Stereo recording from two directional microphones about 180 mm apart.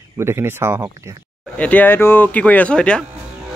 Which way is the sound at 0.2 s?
15° right (ahead or behind).